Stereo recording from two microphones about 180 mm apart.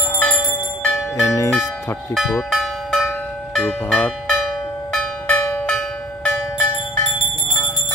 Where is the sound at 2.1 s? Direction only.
Centre (ahead or behind).